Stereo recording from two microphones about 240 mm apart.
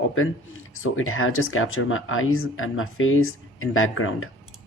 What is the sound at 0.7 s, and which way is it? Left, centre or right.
Speech, left.